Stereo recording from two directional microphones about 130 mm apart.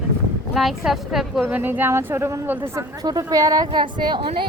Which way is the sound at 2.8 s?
30° right (ahead or behind).